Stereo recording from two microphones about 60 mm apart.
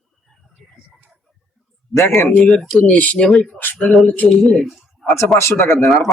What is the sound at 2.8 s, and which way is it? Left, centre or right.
Speech, left.